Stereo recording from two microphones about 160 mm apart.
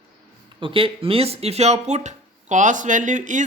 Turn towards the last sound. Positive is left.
turn(degrees=-50)  # may be behind; listen again after turning